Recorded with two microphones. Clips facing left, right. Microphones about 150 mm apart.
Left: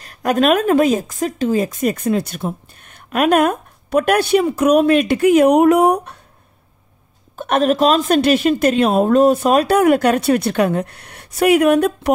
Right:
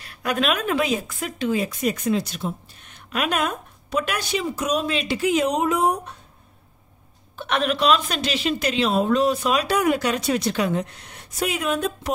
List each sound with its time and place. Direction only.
0.0 s a woman's voice: 45° left (ahead or behind); by 6.1 s 65° left (ahead or behind)
7.3 s a woman's voice: 45° left (ahead or behind); by 12.1 s 65° left (ahead or behind)